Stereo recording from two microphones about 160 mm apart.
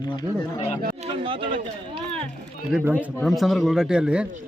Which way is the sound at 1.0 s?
35° right (ahead or behind).